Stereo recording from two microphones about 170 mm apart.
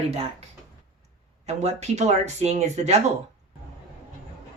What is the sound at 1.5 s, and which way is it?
Speech, 40° right (ahead or behind).